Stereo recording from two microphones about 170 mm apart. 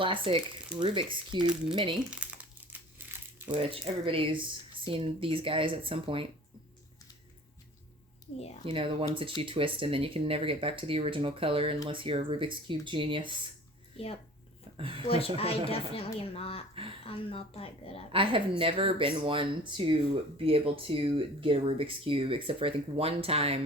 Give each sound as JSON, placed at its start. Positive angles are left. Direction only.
{"t": 0.0, "sound": "speech", "side_deg": -30}
{"t": 3.5, "sound": "speech", "side_deg": -35}
{"t": 8.6, "sound": "speech", "side_deg": -30}
{"t": 13.9, "sound": "speech", "side_deg": 35}
{"t": 14.8, "sound": "speech", "side_deg": -30}
{"t": 15.0, "sound": "speech", "side_deg": 35}
{"t": 18.1, "sound": "speech", "side_deg": -30}